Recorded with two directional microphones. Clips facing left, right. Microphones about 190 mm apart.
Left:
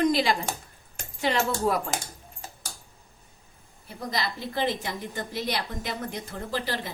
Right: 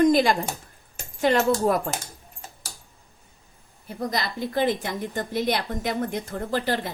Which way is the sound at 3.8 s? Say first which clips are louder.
Right 3 dB; 50° right (ahead or behind).